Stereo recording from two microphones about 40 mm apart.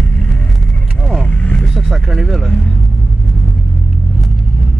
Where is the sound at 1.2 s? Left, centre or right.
Left.